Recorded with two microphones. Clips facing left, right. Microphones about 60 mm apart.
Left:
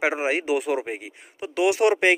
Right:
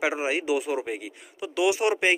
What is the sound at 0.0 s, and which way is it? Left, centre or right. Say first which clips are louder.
Speech: left 2 dB; left.